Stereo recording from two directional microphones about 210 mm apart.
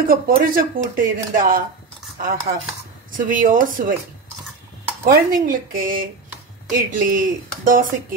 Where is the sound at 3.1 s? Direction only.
40° right (ahead or behind).